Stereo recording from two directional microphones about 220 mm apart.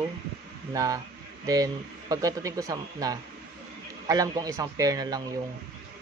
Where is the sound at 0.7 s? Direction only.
15° right (ahead or behind).